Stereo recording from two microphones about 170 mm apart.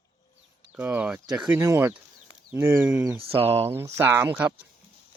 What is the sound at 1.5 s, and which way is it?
Speech, 15° right (ahead or behind).